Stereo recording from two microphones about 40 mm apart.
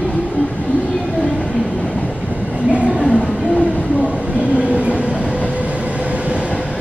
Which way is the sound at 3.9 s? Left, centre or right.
Right.